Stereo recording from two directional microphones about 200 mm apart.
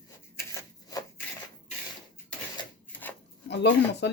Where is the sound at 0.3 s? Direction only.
15° left (ahead or behind).